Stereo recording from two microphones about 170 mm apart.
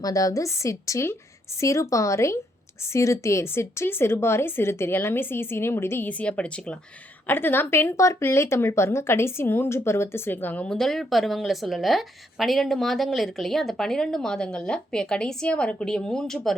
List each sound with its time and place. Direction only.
0.0 s a woman's voice: 20° left (ahead or behind); by 16.6 s centre (ahead or behind)